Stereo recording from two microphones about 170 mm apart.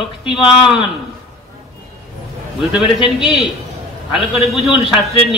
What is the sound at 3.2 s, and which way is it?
A man's voice, centre (ahead or behind).